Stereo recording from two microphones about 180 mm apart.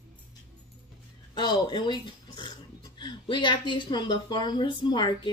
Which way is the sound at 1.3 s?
25° left (ahead or behind).